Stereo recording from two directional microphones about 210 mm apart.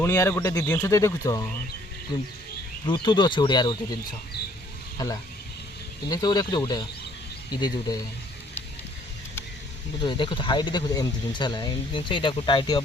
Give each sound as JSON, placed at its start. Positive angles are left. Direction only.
{"t": 0.0, "sound": "speech", "side_deg": 10}
{"t": 4.9, "sound": "speech", "side_deg": 15}
{"t": 10.0, "sound": "speech", "side_deg": 20}